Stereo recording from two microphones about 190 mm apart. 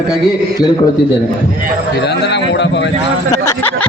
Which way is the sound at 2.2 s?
65° left (ahead or behind).